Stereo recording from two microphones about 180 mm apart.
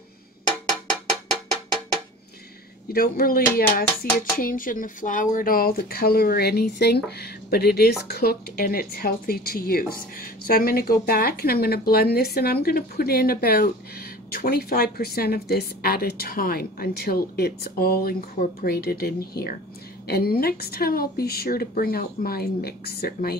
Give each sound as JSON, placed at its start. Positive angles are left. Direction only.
{"t": 2.9, "sound": "speech", "side_deg": 55}